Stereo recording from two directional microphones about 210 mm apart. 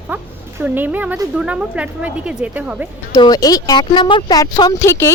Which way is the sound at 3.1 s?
20° left (ahead or behind).